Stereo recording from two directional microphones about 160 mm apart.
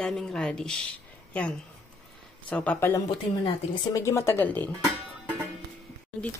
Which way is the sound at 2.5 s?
10° left (ahead or behind).